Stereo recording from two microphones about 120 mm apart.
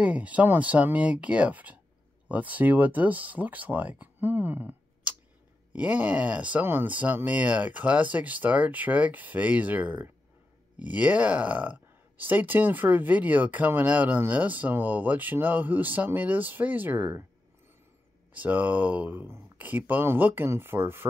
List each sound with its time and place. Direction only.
0.0 s speech: 10° right (ahead or behind)
18.3 s speech: 15° right (ahead or behind)